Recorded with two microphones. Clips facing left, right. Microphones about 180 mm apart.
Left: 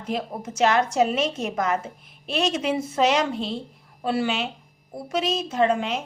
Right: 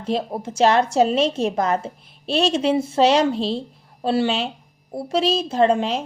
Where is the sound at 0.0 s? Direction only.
30° right (ahead or behind).